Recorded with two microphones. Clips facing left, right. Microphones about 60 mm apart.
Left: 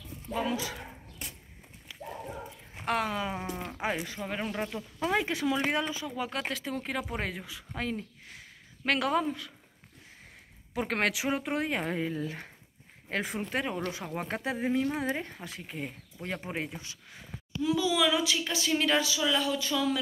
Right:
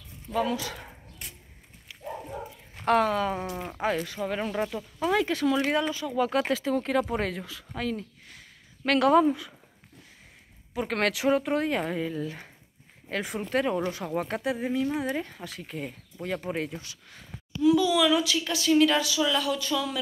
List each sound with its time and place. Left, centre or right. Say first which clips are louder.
0.3 s speech: right 4 dB; centre
2.8 s a woman's voice: right 7 dB; centre
4.2 s speech: right 5 dB; centre
5.0 s a woman's voice: right 4 dB; centre
6.3 s speech: right 8 dB; centre; by 8.9 s left
8.9 s speech: right 8 dB; centre
9.2 s speech: right 9 dB; centre
10.7 s speech: right 2 dB; left
11.0 s a woman's voice: right 7 dB; centre; by 13.4 s left
13.4 s a woman's voice: right 5 dB; centre
14.4 s a woman's voice: left 2 dB; left